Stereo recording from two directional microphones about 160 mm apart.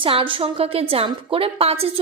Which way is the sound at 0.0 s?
30° right (ahead or behind).